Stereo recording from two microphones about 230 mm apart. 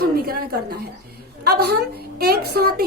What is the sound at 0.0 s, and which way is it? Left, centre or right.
A woman's voice, right.